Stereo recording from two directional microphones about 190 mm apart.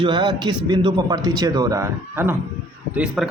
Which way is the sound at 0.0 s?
25° right (ahead or behind).